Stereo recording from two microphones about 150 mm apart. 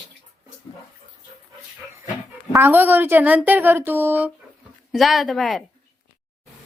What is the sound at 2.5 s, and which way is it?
A woman's voice, 15° right (ahead or behind).